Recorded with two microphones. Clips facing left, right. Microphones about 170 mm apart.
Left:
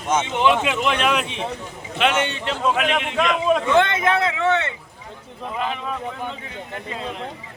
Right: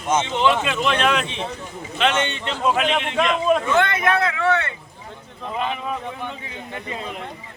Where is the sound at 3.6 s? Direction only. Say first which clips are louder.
Left 2 dB; 25° left (ahead or behind).